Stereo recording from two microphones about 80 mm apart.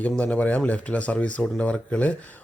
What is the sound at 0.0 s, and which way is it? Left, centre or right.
Speech, centre.